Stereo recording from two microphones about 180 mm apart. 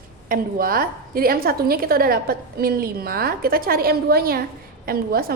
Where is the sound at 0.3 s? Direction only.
55° right (ahead or behind).